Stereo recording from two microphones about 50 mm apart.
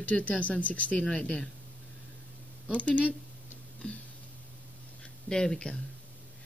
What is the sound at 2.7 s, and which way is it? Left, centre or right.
Speech, left.